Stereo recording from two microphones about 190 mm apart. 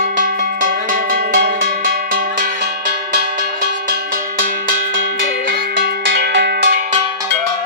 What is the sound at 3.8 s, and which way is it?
Cowbell, 55° right (ahead or behind).